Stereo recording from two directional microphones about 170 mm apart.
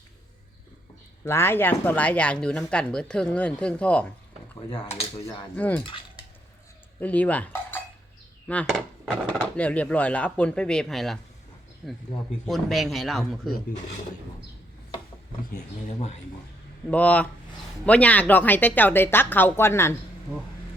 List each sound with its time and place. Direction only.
1.2 s speech: 15° left (ahead or behind)
4.7 s speech: 35° left (ahead or behind)
5.5 s speech: 10° left (ahead or behind)
7.0 s speech: 10° left (ahead or behind)
8.4 s chop: 5° left (ahead or behind)
9.6 s a man's voice: 10° left (ahead or behind)
16.0 s speech: 40° left (ahead or behind)
16.9 s speech: 10° left (ahead or behind)